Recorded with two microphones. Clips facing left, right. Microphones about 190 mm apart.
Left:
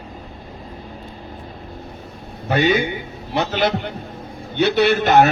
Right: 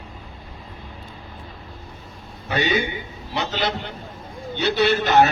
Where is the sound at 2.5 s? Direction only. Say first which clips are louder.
Left 5 dB; 50° left (ahead or behind).